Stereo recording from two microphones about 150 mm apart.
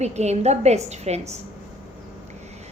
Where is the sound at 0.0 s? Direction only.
45° right (ahead or behind).